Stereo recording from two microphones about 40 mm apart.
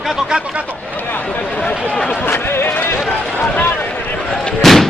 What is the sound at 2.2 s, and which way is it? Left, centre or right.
Run, left.